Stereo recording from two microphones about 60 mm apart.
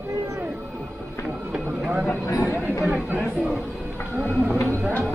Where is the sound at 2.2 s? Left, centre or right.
Left.